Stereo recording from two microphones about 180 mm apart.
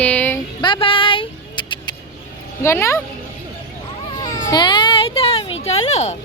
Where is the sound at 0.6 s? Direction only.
25° left (ahead or behind).